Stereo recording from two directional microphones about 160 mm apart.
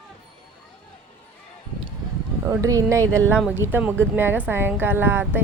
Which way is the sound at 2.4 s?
15° right (ahead or behind).